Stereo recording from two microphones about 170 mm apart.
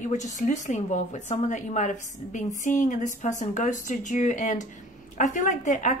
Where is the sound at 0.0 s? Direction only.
45° left (ahead or behind).